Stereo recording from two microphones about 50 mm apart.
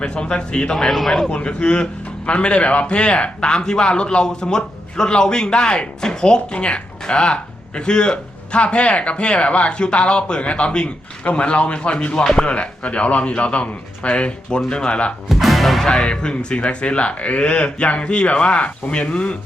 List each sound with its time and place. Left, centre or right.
0.0 s speech: centre
0.9 s speech: centre
1.3 s a man's voice: centre
12.5 s speech: left
15.3 s music: centre
16.0 s speech: left